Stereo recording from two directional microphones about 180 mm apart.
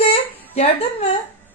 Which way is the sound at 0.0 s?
35° left (ahead or behind).